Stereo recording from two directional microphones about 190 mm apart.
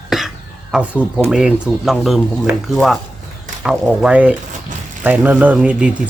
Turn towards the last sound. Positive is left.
turn(degrees=-5)  # may be behind; listen again after turning